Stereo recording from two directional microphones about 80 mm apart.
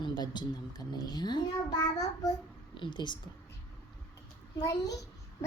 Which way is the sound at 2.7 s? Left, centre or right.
Left.